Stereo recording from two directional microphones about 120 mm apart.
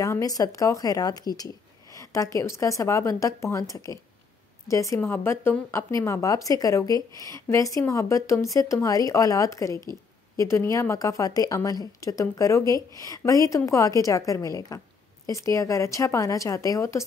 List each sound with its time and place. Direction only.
0.0 s a woman's voice: 30° left (ahead or behind)